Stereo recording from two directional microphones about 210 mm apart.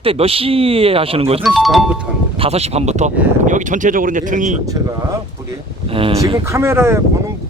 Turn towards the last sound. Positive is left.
turn(degrees=-10)  # may be behind; listen again after turning